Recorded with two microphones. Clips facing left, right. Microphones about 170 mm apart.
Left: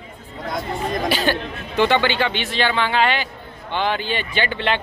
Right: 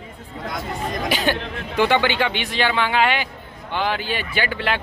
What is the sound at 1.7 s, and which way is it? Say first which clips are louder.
A man's voice: left 1 dB; 10° right (ahead or behind).